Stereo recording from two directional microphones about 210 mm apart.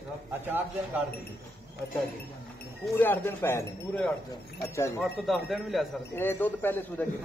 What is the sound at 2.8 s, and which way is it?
Speech, 10° left (ahead or behind).